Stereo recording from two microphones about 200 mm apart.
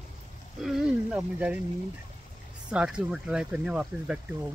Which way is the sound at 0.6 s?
Centre (ahead or behind).